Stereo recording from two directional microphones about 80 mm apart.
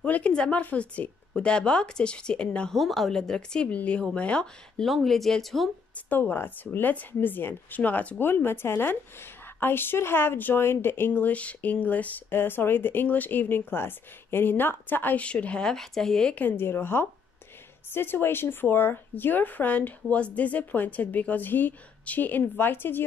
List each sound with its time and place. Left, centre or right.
0.0 s speech: centre
4.8 s speech: centre
6.0 s speech: left; by 16.3 s centre
16.3 s speech: left